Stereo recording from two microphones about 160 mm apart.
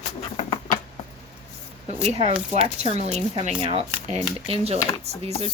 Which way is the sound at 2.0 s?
40° right (ahead or behind).